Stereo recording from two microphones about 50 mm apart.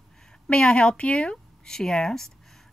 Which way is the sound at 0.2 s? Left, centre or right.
Centre.